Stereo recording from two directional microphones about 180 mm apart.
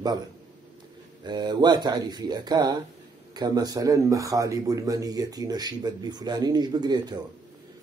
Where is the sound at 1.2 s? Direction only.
25° right (ahead or behind).